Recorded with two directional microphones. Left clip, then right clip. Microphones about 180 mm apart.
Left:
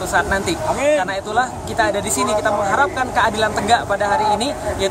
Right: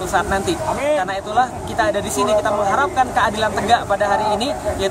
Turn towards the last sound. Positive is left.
turn(degrees=15)  # may be behind; listen again after turning